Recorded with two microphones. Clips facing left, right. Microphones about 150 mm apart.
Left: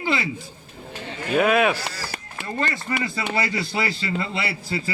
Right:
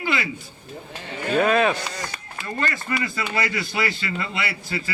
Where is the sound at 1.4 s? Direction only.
5° left (ahead or behind).